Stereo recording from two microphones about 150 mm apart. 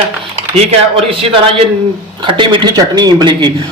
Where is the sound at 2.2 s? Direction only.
35° right (ahead or behind).